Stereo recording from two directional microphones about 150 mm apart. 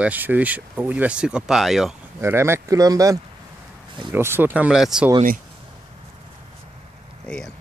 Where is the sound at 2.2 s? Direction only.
15° right (ahead or behind).